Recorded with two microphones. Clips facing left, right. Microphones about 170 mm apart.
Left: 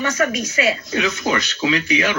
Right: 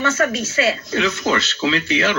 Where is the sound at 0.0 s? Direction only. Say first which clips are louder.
Right 1 dB; 15° left (ahead or behind).